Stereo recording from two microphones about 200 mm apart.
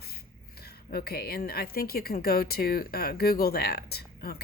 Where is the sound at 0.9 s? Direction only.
50° left (ahead or behind).